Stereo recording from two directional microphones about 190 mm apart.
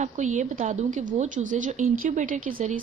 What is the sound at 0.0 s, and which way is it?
A woman's voice, 40° right (ahead or behind).